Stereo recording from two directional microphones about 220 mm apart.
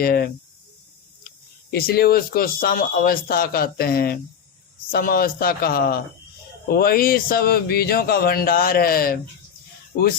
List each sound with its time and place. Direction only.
0.0 s speech: 45° left (ahead or behind)
1.7 s speech: 45° left (ahead or behind)